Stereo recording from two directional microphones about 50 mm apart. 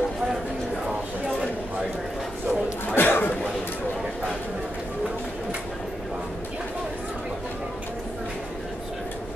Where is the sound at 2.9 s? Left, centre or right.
Left.